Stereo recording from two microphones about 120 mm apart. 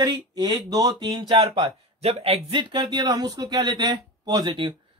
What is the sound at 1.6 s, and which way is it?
Speech, 60° right (ahead or behind).